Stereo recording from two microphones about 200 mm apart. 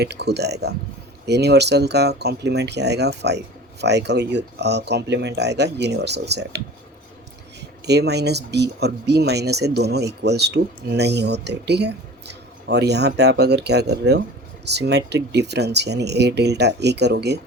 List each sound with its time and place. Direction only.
0.0 s speech: 55° right (ahead or behind)
7.6 s speech: 55° right (ahead or behind)